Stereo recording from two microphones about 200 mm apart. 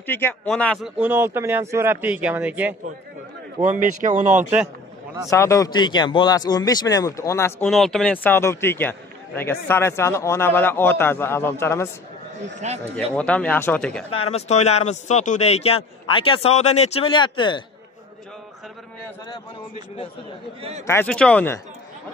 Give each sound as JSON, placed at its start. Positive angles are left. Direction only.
{"t": 0.0, "sound": "a man's voice", "side_deg": 10}
{"t": 0.9, "sound": "speech", "side_deg": -10}
{"t": 3.8, "sound": "speech", "side_deg": -40}
{"t": 4.4, "sound": "speech", "side_deg": -10}
{"t": 5.3, "sound": "speech", "side_deg": 15}
{"t": 7.6, "sound": "a man's voice", "side_deg": 0}
{"t": 12.5, "sound": "speech", "side_deg": -35}
{"t": 12.9, "sound": "speech", "side_deg": 5}
{"t": 14.3, "sound": "a man's voice", "side_deg": 35}
{"t": 20.8, "sound": "a man's voice", "side_deg": 10}